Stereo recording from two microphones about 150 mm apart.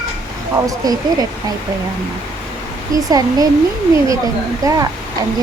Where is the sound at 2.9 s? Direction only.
25° right (ahead or behind).